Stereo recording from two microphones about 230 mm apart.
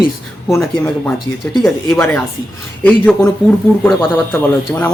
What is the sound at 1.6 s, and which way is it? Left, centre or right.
A man's voice, centre.